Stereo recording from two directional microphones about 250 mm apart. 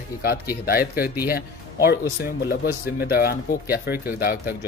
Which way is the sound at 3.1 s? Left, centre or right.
Left.